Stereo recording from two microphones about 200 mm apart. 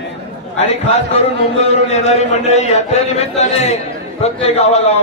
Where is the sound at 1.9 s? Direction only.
35° left (ahead or behind).